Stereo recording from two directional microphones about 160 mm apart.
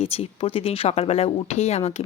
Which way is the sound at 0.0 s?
35° left (ahead or behind).